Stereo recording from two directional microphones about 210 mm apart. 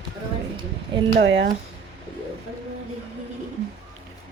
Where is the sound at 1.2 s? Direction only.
60° right (ahead or behind).